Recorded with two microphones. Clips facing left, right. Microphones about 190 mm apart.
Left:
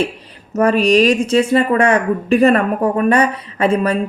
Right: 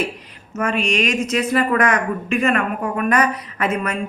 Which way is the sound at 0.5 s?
35° left (ahead or behind).